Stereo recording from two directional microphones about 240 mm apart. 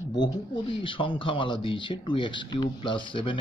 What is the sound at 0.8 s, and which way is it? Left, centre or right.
Speech, left.